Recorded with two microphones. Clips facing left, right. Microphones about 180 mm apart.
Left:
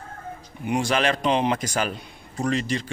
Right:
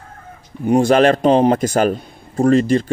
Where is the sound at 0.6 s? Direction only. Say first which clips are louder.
Right 10 dB; 45° right (ahead or behind).